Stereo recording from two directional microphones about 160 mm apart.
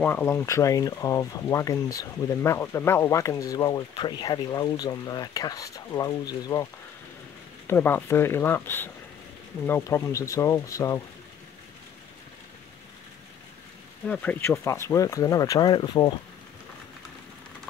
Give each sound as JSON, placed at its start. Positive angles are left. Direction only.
{"t": 0.0, "sound": "speech", "side_deg": 15}
{"t": 14.0, "sound": "speech", "side_deg": 10}